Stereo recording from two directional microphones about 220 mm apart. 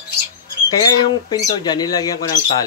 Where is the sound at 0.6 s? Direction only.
20° left (ahead or behind).